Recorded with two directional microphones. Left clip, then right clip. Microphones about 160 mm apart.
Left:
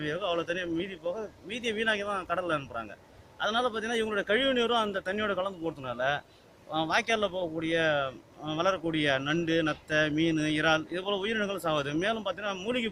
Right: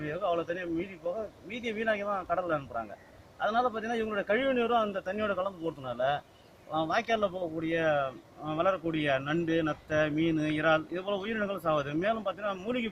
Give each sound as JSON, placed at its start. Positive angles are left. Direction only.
{"t": 0.0, "sound": "a man's voice", "side_deg": 35}